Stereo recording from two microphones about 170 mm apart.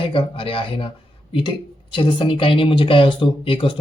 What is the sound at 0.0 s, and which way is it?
Speech, 30° left (ahead or behind).